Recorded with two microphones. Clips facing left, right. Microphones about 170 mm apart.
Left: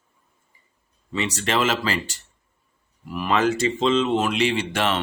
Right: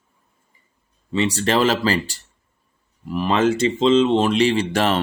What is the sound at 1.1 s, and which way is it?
Speech, 30° right (ahead or behind).